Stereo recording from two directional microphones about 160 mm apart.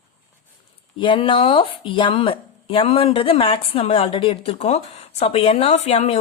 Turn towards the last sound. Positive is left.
turn(degrees=40)  # may be behind; listen again after turning